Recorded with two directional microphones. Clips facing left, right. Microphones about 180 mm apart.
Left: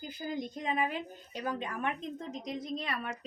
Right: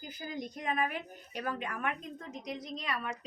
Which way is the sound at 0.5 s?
25° left (ahead or behind).